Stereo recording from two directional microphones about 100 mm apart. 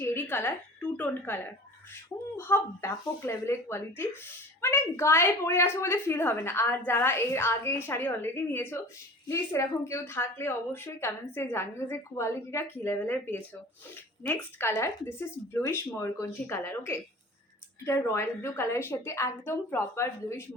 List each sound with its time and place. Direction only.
0.0 s speech: 25° left (ahead or behind)